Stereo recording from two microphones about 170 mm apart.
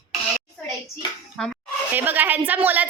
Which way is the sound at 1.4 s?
5° left (ahead or behind).